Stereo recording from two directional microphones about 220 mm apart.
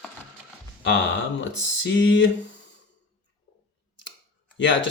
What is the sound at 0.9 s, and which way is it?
Speech, 55° left (ahead or behind).